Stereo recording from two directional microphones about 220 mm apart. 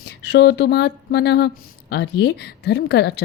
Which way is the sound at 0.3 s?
50° left (ahead or behind).